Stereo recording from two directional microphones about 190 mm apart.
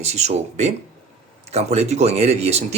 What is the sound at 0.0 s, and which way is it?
Speech, 35° right (ahead or behind).